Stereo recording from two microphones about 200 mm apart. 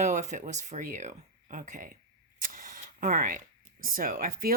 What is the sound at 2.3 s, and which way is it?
Camera, 45° right (ahead or behind).